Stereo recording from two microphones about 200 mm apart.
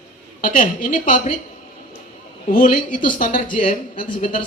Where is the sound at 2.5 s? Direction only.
40° left (ahead or behind).